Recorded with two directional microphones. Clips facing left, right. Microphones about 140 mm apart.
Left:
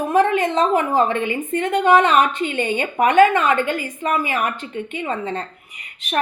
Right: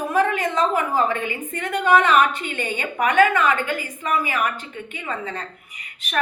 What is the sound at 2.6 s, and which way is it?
A woman's voice, 25° left (ahead or behind).